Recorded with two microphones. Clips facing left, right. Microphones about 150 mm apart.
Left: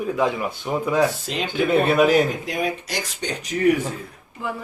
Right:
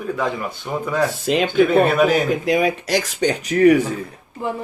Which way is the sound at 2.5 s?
85° right.